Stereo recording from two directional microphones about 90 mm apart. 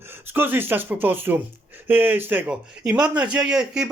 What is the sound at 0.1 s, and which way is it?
Speech, 20° right (ahead or behind).